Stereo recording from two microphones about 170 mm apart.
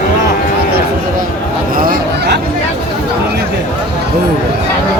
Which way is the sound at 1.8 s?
75° right (ahead or behind).